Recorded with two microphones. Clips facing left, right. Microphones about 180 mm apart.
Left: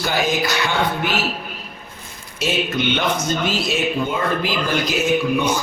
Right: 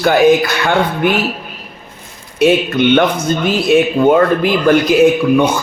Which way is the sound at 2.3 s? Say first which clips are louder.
Right 10 dB; 60° right (ahead or behind).